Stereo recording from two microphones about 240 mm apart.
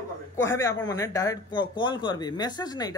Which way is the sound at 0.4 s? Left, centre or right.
Centre.